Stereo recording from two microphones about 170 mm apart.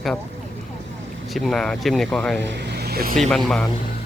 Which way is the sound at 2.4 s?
85° right.